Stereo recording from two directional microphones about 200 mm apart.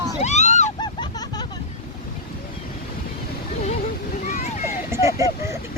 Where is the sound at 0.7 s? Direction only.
20° left (ahead or behind).